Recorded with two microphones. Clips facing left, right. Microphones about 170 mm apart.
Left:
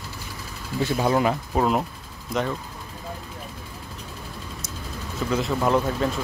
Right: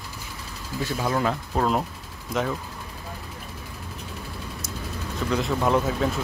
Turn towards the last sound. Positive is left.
turn(degrees=0)  # may be behind; listen again after turning